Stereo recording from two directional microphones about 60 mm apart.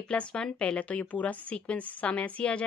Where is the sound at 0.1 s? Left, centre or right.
Centre.